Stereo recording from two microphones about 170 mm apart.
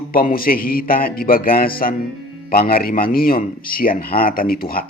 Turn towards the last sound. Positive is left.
turn(degrees=60)  # may be behind; listen again after turning